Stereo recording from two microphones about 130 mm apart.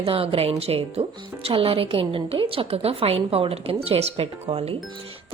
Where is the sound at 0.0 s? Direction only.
45° right (ahead or behind).